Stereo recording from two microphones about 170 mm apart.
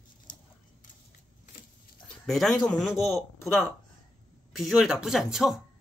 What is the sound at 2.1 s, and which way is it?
Speech, centre (ahead or behind).